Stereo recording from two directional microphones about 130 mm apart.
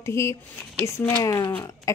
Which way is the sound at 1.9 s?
25° left (ahead or behind).